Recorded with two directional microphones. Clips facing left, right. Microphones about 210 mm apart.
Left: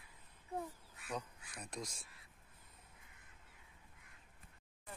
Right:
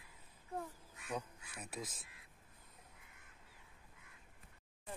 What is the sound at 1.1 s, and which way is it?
Speech, 5° right (ahead or behind).